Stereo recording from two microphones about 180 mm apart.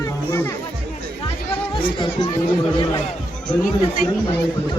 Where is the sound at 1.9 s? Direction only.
25° left (ahead or behind).